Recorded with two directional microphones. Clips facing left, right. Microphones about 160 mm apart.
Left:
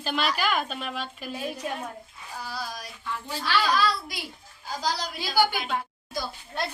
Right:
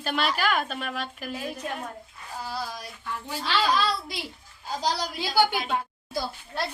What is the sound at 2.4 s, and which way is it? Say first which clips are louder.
A woman's voice: right 2 dB; 20° right (ahead or behind).